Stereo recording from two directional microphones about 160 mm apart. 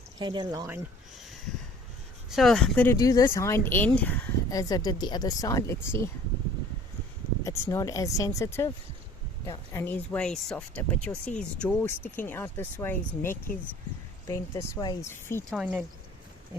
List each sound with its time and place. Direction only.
0.2 s speech: 30° right (ahead or behind)
2.3 s speech: centre (ahead or behind)
2.8 s speech: 20° left (ahead or behind)
4.4 s speech: 25° left (ahead or behind)
7.4 s speech: 20° left (ahead or behind)
9.7 s speech: 15° left (ahead or behind)
15.5 s speech: 10° right (ahead or behind)